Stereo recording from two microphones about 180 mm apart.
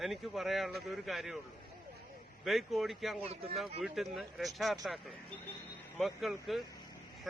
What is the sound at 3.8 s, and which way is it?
A man's voice, centre (ahead or behind).